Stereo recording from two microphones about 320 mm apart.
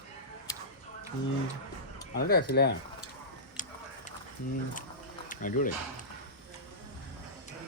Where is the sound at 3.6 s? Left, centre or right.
Left.